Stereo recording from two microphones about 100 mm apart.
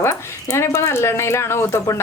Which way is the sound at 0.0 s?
25° left (ahead or behind).